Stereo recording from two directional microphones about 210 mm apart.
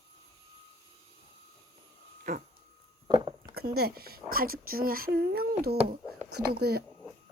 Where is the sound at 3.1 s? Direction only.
20° right (ahead or behind).